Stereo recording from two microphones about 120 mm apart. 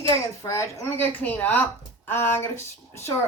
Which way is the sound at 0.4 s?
25° left (ahead or behind).